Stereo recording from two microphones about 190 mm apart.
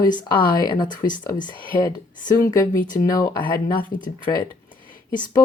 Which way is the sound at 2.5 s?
20° left (ahead or behind).